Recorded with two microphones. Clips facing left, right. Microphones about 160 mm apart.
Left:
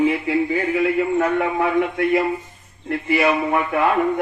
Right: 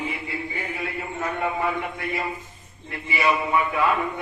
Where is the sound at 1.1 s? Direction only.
85° left.